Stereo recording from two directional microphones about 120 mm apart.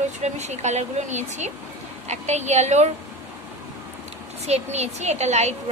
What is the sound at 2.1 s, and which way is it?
Speech, 70° right (ahead or behind).